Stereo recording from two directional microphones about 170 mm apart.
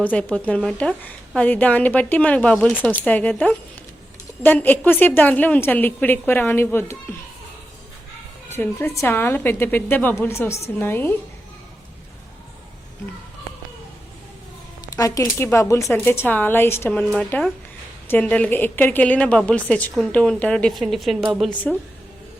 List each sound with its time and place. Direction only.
0.0 s a woman's voice: 10° left (ahead or behind)
8.5 s a woman's voice: 15° left (ahead or behind)
14.9 s a woman's voice: 20° left (ahead or behind); by 21.8 s centre (ahead or behind)